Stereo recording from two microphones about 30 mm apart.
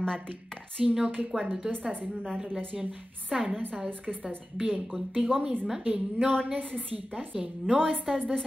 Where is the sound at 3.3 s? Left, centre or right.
Right.